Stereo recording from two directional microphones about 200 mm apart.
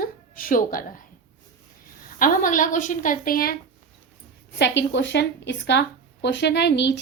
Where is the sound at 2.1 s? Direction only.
45° left (ahead or behind).